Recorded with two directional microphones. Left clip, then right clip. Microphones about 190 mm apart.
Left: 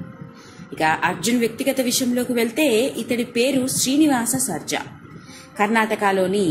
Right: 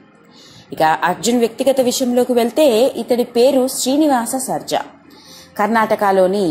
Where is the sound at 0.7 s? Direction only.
25° right (ahead or behind).